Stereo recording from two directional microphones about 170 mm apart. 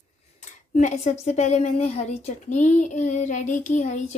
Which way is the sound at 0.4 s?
45° left (ahead or behind).